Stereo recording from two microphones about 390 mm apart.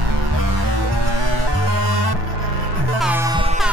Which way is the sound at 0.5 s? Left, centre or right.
Right.